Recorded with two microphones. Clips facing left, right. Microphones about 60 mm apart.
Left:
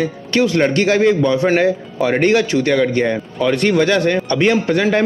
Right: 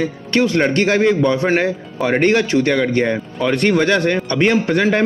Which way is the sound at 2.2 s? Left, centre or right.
Right.